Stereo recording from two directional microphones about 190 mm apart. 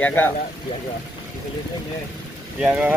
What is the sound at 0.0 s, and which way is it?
Speech, 10° left (ahead or behind).